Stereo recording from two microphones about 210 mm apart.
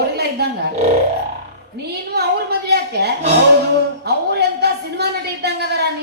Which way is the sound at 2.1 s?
50° right (ahead or behind).